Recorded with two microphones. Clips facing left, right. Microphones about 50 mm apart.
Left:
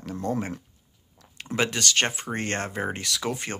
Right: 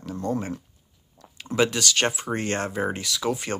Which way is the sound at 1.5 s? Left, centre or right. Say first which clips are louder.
Right 2 dB; left.